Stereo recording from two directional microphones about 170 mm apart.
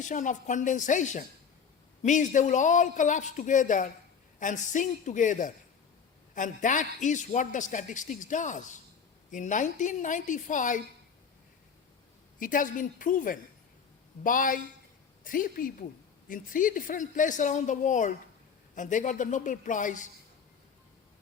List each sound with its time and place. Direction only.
0.0 s a man's voice: 45° left (ahead or behind)
12.4 s a man's voice: 50° left (ahead or behind)